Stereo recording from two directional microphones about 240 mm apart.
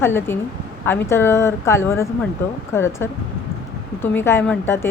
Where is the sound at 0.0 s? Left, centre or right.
Centre.